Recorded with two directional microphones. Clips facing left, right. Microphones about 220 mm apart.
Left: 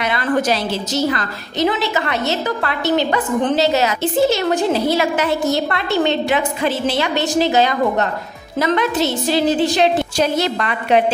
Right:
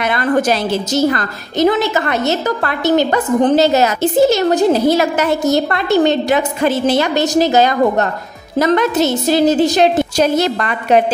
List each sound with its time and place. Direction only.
0.0 s a woman's voice: 50° right (ahead or behind)